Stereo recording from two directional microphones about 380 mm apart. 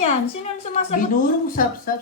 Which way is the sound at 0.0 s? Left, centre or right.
Centre.